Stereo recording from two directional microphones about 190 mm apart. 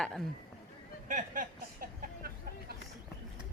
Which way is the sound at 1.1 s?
45° right (ahead or behind).